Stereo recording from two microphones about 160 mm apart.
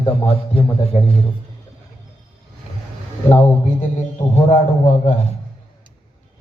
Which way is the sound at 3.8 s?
50° left (ahead or behind).